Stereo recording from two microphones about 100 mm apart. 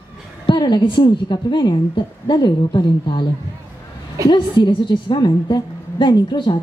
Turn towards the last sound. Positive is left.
turn(degrees=55)  # may be behind; listen again after turning